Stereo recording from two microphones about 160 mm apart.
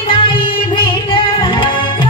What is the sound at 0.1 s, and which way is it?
Music, 30° left (ahead or behind).